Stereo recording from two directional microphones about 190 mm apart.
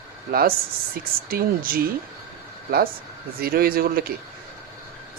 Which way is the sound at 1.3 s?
50° right (ahead or behind).